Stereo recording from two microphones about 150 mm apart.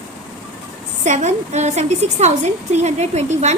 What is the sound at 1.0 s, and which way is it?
A woman's voice, 50° right (ahead or behind).